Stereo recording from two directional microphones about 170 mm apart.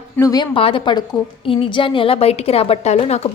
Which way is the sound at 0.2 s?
20° left (ahead or behind).